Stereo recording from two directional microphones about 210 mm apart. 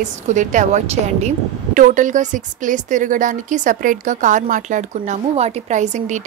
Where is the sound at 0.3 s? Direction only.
35° right (ahead or behind).